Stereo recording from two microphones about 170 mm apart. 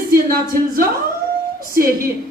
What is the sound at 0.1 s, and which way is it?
Speech, 55° right (ahead or behind).